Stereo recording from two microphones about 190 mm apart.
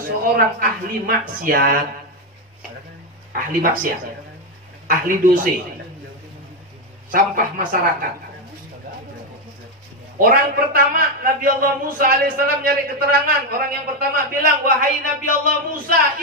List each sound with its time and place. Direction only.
0.6 s a man's voice: 50° right (ahead or behind)
3.3 s a man's voice: 45° right (ahead or behind)
7.1 s a man's voice: 50° right (ahead or behind)
10.1 s a man's voice: 50° right (ahead or behind)